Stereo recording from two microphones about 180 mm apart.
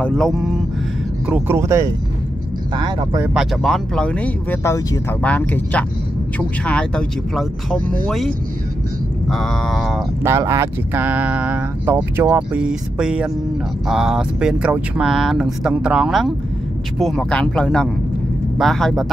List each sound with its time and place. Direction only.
0.0 s speech: 5° left (ahead or behind)
1.2 s speech: 10° right (ahead or behind)
3.3 s speech: centre (ahead or behind)
9.3 s speech: centre (ahead or behind)
10.2 s speech: 15° right (ahead or behind); by 19.0 s centre (ahead or behind)